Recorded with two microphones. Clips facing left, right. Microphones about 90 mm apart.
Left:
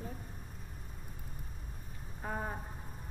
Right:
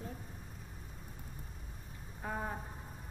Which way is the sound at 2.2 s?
15° left (ahead or behind).